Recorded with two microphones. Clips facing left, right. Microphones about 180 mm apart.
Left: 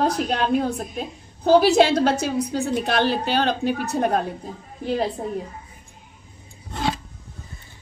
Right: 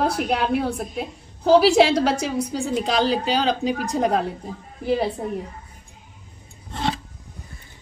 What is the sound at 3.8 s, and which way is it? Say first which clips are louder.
A woman's voice: right 2 dB; 15° right (ahead or behind).